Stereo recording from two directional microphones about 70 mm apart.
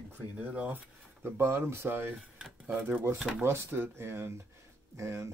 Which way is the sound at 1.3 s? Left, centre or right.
Right.